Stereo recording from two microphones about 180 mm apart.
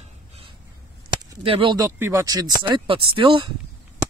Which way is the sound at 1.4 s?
30° right (ahead or behind).